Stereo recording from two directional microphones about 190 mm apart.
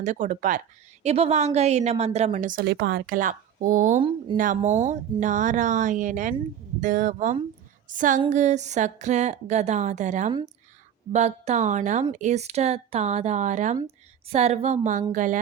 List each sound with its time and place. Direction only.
0.0 s a woman's voice: 40° right (ahead or behind)
7.9 s a sound: 45° right (ahead or behind)
8.3 s a woman's voice: 40° right (ahead or behind)